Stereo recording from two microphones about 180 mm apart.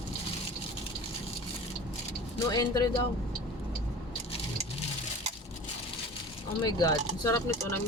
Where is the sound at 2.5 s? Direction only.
20° left (ahead or behind).